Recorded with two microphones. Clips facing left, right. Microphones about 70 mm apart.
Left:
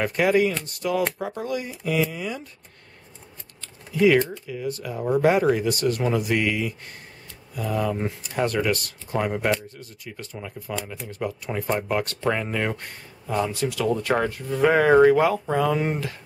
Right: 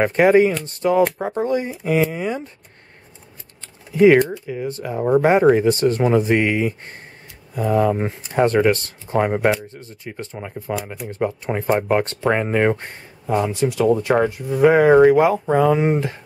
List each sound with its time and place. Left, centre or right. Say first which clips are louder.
0.0 s speech: right 7 dB; right
3.9 s speech: right 6 dB; right